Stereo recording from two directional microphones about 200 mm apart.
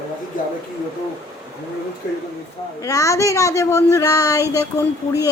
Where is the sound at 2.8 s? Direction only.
15° left (ahead or behind).